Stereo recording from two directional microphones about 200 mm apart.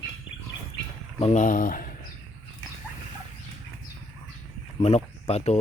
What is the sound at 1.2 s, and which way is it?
Speech, 35° left (ahead or behind).